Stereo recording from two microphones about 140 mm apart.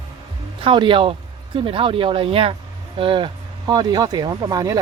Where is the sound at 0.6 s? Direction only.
35° right (ahead or behind).